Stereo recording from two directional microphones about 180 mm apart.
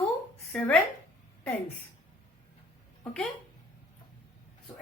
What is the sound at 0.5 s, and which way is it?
Speech, 5° left (ahead or behind).